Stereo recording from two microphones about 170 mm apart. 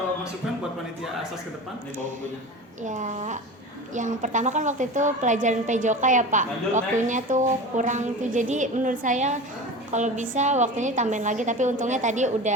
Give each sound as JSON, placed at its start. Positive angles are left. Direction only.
{"t": 2.8, "sound": "a woman's voice", "side_deg": -50}